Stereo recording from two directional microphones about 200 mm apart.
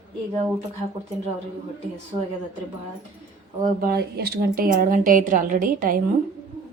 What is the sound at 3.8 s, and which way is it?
A woman's voice, 50° right (ahead or behind).